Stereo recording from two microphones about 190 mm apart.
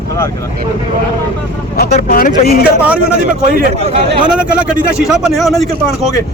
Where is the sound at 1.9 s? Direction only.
35° left (ahead or behind).